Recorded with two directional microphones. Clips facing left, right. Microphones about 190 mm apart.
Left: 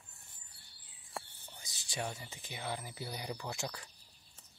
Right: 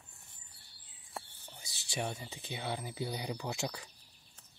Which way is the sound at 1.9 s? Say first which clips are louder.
Right 2 dB; 15° right (ahead or behind).